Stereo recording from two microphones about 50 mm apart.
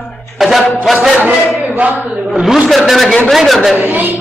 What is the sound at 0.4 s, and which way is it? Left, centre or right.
Music, centre.